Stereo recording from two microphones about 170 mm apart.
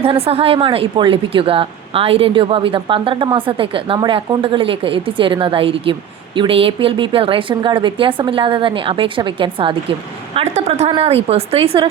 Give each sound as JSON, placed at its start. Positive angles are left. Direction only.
{"t": 0.0, "sound": "speech", "side_deg": -35}